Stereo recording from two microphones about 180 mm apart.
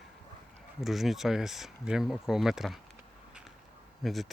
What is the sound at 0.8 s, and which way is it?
Speech, centre (ahead or behind).